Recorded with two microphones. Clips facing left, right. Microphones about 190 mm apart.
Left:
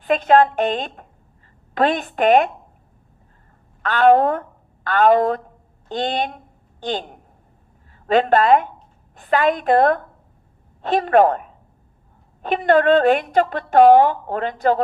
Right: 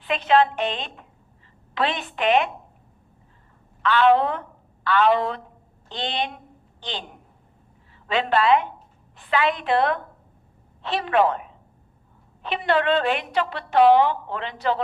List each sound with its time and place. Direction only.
0.0 s a woman's voice: 45° left (ahead or behind)
3.8 s a woman's voice: 45° left (ahead or behind)